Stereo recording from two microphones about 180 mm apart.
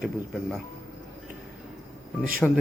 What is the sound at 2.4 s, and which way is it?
Speech, centre (ahead or behind).